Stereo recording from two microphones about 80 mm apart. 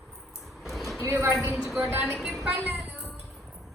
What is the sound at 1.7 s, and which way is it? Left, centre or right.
Music, right.